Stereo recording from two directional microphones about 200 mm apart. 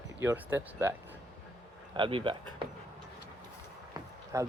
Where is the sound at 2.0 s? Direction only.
25° right (ahead or behind).